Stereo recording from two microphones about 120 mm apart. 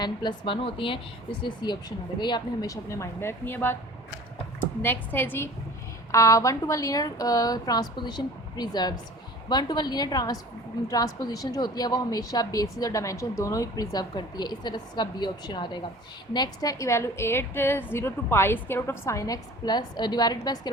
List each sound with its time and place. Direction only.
0.0 s a woman's voice: 40° left (ahead or behind)